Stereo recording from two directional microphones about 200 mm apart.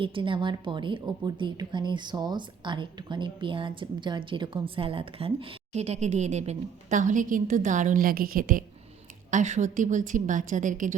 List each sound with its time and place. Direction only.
0.0 s a woman's voice: 25° right (ahead or behind)